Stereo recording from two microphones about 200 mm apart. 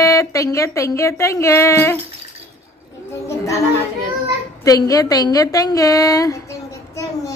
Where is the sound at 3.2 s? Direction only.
15° left (ahead or behind).